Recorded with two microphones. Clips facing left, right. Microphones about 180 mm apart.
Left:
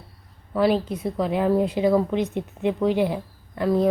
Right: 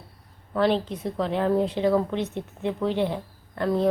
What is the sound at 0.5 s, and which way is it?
A woman's voice, 5° left (ahead or behind).